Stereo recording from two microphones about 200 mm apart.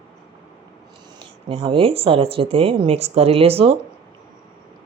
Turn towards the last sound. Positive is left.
turn(degrees=-30)  # may be behind; listen again after turning